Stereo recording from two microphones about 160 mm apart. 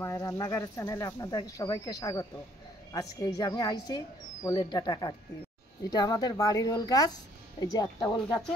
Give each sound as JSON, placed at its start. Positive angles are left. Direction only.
{"t": 0.0, "sound": "speech", "side_deg": 15}